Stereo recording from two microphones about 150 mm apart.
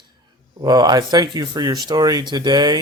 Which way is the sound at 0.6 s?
25° right (ahead or behind).